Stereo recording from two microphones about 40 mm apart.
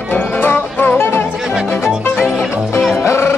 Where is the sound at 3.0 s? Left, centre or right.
Left.